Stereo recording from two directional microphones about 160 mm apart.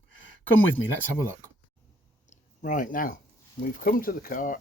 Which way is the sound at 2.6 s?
55° left (ahead or behind).